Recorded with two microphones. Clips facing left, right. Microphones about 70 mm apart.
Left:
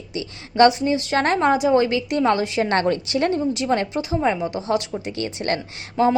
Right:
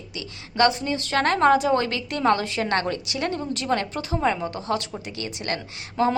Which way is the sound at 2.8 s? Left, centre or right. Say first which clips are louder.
Left 6 dB; left.